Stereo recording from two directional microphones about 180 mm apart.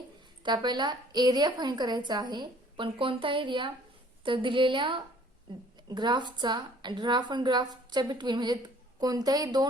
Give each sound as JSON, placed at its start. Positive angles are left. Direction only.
{"t": 0.4, "sound": "a woman's voice", "side_deg": -25}